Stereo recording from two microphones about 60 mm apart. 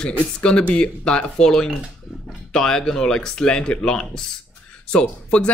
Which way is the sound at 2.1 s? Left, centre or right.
Centre.